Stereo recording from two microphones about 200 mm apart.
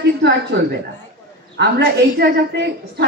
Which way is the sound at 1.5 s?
55° right (ahead or behind).